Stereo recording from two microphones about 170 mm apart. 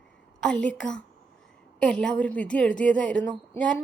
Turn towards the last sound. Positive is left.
turn(degrees=5)  # may be behind; listen again after turning